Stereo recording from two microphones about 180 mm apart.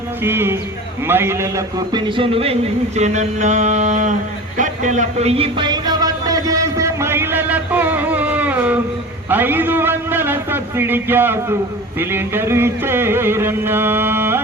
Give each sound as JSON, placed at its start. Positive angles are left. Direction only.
{"t": 0.2, "sound": "music", "side_deg": -10}
{"t": 1.0, "sound": "a sound", "side_deg": -10}
{"t": 9.3, "sound": "a man's voice", "side_deg": -10}
{"t": 11.9, "sound": "music", "side_deg": -10}